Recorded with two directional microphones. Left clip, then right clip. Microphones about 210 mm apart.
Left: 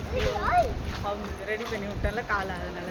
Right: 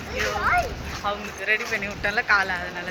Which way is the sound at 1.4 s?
15° left (ahead or behind).